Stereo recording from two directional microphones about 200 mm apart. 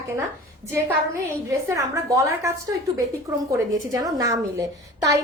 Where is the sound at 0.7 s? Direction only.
15° right (ahead or behind).